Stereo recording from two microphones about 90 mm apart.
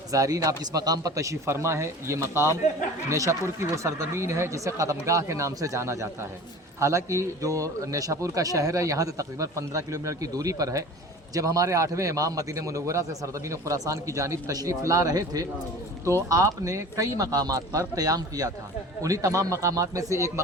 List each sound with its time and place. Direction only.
0.1 s a man's voice: 40° right (ahead or behind)